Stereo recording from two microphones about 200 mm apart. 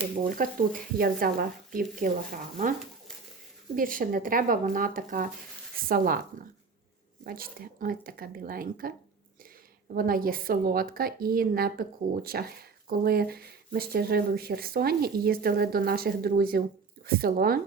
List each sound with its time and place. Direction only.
0.3 s a woman's voice: 45° right (ahead or behind)
3.8 s a woman's voice: 45° right (ahead or behind)
7.3 s a woman's voice: 45° right (ahead or behind)
9.9 s a woman's voice: 45° right (ahead or behind)